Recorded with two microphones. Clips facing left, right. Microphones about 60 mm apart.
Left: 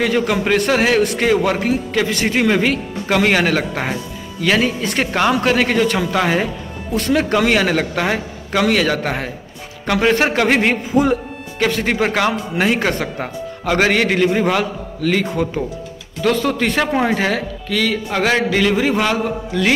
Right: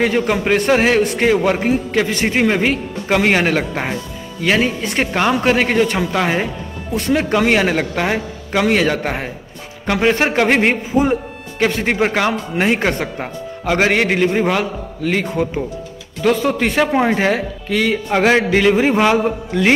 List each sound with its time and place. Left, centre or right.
0.0 s a man's voice: right
12.8 s a man's voice: centre